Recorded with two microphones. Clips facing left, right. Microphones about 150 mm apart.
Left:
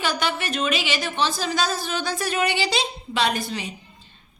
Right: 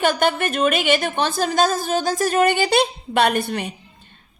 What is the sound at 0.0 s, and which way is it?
A woman's voice, 50° right (ahead or behind).